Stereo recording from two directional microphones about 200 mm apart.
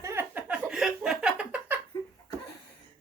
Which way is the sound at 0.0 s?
10° right (ahead or behind).